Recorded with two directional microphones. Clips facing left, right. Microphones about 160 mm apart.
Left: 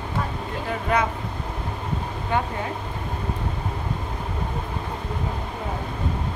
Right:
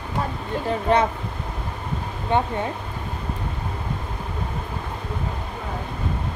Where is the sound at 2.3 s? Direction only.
25° right (ahead or behind).